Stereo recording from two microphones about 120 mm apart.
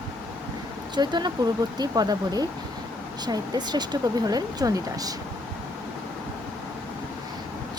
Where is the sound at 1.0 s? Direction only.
35° right (ahead or behind).